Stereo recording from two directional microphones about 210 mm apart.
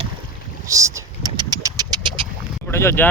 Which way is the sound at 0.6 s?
15° right (ahead or behind).